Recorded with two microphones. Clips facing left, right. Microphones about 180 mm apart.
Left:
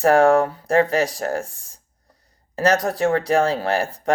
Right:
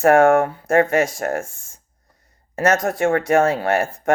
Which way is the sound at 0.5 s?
35° left (ahead or behind).